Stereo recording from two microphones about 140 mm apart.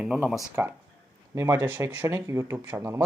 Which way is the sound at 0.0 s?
5° right (ahead or behind).